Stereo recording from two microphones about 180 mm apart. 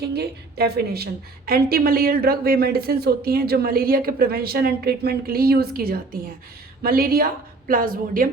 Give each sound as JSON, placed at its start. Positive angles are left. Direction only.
{"t": 0.0, "sound": "a woman's voice", "side_deg": -60}